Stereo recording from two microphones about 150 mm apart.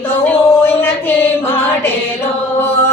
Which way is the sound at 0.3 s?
15° left (ahead or behind).